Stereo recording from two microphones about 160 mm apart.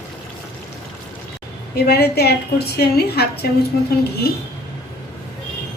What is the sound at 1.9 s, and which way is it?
A woman's voice, 80° left.